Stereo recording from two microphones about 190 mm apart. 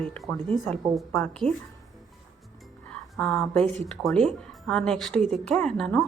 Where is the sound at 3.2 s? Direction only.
5° left (ahead or behind).